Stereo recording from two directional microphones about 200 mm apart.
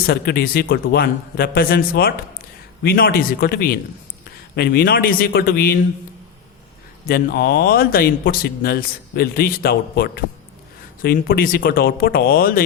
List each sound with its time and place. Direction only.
0.1 s speech: 50° left (ahead or behind)
7.1 s speech: 50° left (ahead or behind)